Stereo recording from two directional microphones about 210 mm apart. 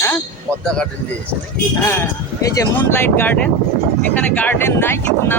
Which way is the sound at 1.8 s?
15° left (ahead or behind).